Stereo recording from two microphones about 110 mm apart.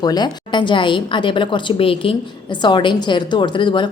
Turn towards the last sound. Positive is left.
turn(degrees=45)  # may be behind; listen again after turning